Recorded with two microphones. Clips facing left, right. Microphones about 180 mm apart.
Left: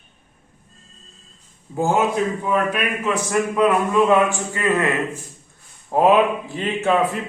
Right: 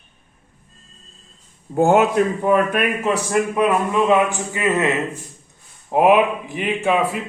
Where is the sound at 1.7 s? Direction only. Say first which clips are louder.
Right 5 dB; 65° right (ahead or behind).